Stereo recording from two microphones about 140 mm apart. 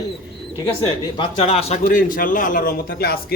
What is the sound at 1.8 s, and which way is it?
A man's voice, 80° left.